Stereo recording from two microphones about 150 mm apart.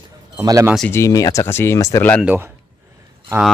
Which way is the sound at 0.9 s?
20° left (ahead or behind).